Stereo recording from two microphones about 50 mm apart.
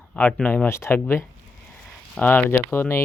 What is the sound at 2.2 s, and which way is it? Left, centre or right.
Speech, left.